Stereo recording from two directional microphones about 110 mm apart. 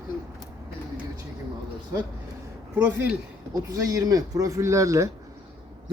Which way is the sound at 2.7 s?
15° right (ahead or behind).